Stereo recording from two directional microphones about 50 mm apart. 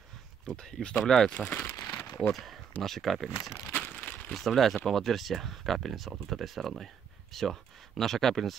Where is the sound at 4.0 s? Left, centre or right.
Left.